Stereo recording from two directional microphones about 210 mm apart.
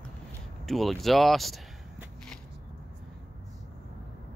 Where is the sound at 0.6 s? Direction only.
Centre (ahead or behind).